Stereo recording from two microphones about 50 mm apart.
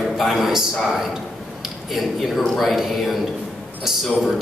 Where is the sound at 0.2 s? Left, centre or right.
Centre.